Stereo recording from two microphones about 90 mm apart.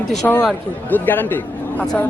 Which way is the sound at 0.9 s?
20° left (ahead or behind).